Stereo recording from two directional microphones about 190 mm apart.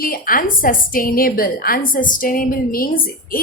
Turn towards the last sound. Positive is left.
turn(degrees=50)  # may be behind; listen again after turning